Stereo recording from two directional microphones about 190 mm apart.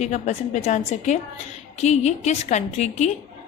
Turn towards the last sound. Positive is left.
turn(degrees=35)  # may be behind; listen again after turning